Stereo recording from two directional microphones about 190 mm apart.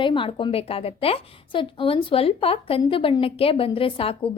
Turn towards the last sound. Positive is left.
turn(degrees=30)  # may be behind; listen again after turning